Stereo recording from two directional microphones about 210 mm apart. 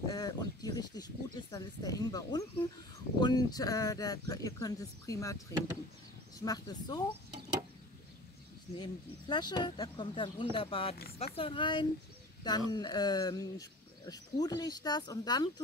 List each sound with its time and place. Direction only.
0.1 s speech: 20° left (ahead or behind)
6.4 s speech: 20° left (ahead or behind)
8.7 s speech: 20° left (ahead or behind)